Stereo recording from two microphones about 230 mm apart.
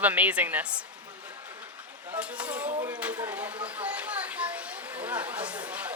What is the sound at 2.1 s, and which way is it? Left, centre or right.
A child's voice, centre.